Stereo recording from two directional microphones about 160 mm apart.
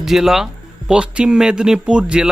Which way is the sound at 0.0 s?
Centre (ahead or behind).